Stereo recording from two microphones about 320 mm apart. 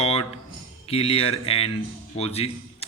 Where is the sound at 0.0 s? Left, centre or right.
Centre.